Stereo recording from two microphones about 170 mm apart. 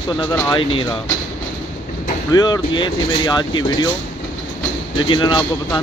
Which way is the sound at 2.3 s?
25° left (ahead or behind).